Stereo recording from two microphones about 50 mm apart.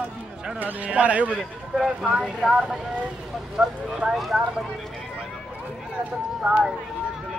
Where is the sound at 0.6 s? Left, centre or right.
Right.